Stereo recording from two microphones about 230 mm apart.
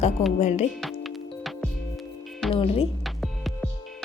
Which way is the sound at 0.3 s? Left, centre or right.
Left.